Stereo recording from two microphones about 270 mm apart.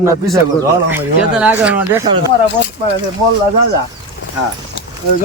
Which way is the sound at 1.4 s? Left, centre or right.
Centre.